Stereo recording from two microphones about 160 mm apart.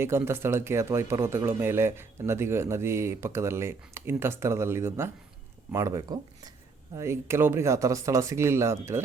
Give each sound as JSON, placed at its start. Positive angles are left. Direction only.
{"t": 0.0, "sound": "speech", "side_deg": -15}